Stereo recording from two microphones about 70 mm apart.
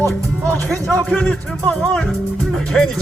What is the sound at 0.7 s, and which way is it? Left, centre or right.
Speech, right.